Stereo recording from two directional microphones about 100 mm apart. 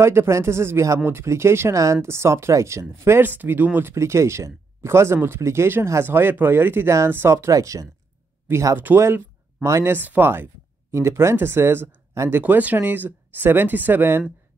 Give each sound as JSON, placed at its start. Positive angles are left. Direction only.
{"t": 0.0, "sound": "speech", "side_deg": -25}